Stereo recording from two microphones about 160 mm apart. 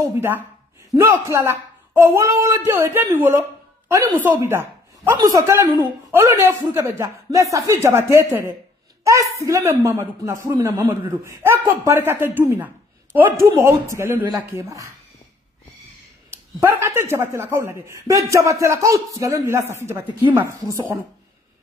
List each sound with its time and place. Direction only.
0.0 s speech: 15° right (ahead or behind)
16.3 s speech: 15° right (ahead or behind)